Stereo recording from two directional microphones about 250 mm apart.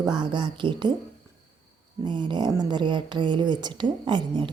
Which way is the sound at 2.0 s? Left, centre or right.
Centre.